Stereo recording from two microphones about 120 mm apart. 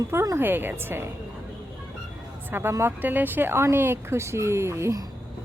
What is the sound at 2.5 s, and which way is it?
Speech, 20° right (ahead or behind).